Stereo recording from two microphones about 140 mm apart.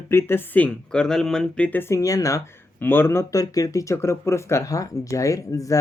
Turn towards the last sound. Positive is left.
turn(degrees=25)  # may be behind; listen again after turning